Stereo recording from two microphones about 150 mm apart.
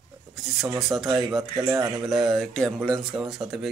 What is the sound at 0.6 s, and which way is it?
Speech, centre (ahead or behind).